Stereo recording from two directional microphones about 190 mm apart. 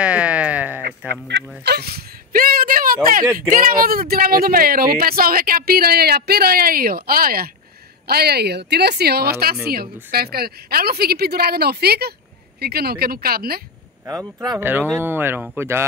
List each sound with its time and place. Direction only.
0.0 s a sound: 5° right (ahead or behind)
1.6 s a woman's voice: 55° right (ahead or behind)
14.0 s speech: 20° right (ahead or behind)